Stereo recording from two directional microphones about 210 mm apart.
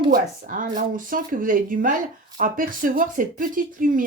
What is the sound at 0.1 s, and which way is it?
Speech, 40° right (ahead or behind).